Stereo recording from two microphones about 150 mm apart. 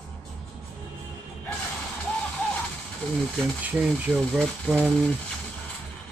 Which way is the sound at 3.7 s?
Centre (ahead or behind).